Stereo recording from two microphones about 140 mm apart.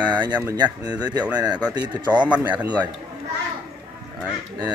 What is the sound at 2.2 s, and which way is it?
Speech, 10° right (ahead or behind).